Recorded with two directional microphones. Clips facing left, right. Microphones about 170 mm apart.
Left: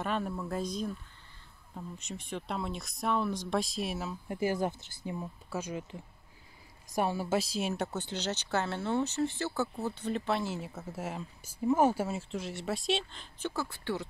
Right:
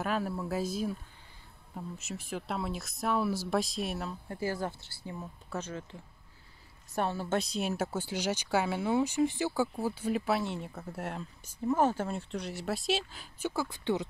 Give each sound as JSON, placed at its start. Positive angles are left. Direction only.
{"t": 0.0, "sound": "speech", "side_deg": -5}
{"t": 2.0, "sound": "speech", "side_deg": -5}
{"t": 4.3, "sound": "speech", "side_deg": 15}